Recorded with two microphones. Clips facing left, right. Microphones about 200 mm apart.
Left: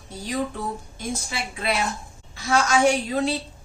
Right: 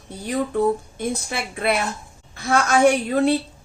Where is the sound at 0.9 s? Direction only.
55° right (ahead or behind).